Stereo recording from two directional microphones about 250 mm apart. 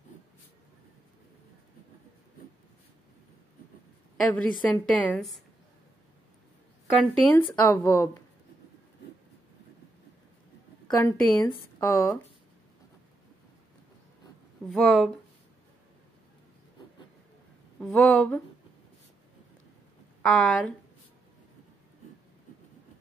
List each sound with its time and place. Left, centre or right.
4.4 s a woman's voice: centre
6.9 s speech: centre
10.9 s speech: centre
14.7 s a woman's voice: centre
17.7 s a woman's voice: centre
20.2 s speech: centre